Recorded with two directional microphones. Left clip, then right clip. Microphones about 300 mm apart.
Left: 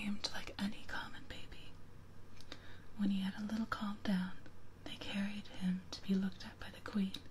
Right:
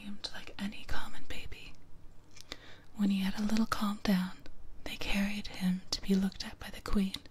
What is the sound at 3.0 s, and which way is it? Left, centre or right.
Speech, centre.